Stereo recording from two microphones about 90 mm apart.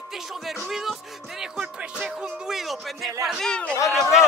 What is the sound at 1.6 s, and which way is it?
Music, 15° right (ahead or behind).